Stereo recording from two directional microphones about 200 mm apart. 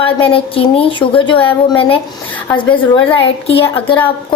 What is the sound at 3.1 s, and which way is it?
Speech, 30° left (ahead or behind).